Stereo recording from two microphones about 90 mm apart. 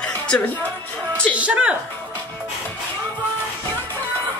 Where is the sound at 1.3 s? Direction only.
15° right (ahead or behind).